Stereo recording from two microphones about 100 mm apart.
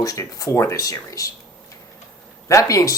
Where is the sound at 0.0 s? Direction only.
35° left (ahead or behind).